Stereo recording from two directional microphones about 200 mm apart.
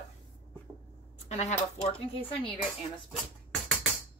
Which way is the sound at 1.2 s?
35° left (ahead or behind).